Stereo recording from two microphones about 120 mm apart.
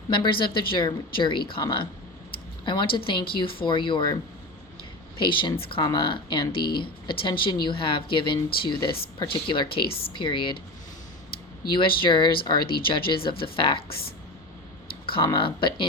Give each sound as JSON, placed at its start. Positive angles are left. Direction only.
{"t": 0.1, "sound": "speech", "side_deg": 45}
{"t": 5.2, "sound": "speech", "side_deg": 45}
{"t": 11.7, "sound": "speech", "side_deg": 45}
{"t": 15.0, "sound": "speech", "side_deg": 45}